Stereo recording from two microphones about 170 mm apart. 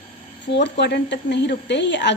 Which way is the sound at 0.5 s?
85° left.